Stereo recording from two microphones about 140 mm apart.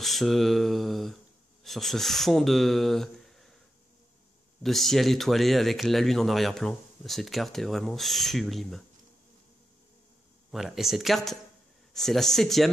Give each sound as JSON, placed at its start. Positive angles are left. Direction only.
{"t": 0.0, "sound": "speech", "side_deg": 0}
{"t": 4.6, "sound": "speech", "side_deg": 0}
{"t": 10.5, "sound": "speech", "side_deg": 0}